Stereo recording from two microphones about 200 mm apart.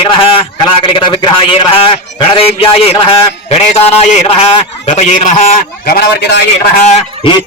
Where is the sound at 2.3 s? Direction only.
30° left (ahead or behind).